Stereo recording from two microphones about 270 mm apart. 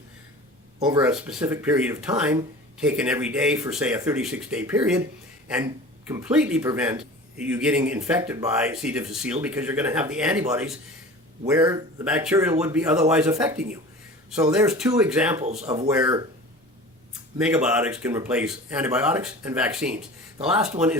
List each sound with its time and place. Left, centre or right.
0.8 s speech: centre
1.1 s speech: centre
15.4 s speech: right
15.7 s speech: centre
17.3 s speech: centre